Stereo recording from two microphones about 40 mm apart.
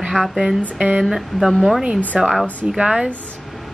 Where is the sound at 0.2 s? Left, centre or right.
Left.